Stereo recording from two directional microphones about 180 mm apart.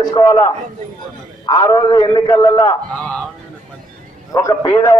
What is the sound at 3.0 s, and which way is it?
Honk, 5° left (ahead or behind).